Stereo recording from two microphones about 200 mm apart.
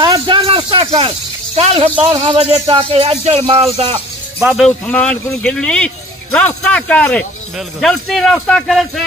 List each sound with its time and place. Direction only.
0.0 s snake: 25° right (ahead or behind)
2.6 s speech: 25° right (ahead or behind)
4.4 s speech: 5° right (ahead or behind)
4.6 s speech: 5° left (ahead or behind)